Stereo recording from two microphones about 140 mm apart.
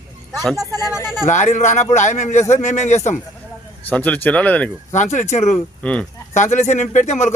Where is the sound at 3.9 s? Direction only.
10° left (ahead or behind).